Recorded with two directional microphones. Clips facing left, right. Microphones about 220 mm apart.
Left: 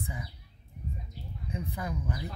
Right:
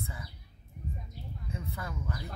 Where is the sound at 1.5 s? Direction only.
15° left (ahead or behind).